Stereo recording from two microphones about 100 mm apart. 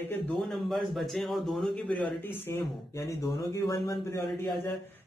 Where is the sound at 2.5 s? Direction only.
30° left (ahead or behind).